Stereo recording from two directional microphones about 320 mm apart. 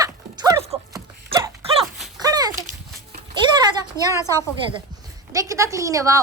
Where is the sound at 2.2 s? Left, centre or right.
Centre.